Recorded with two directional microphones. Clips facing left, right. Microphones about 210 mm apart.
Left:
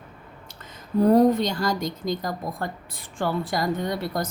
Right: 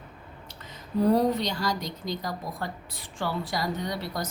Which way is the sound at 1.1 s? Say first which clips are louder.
Left 6 dB; 50° left (ahead or behind).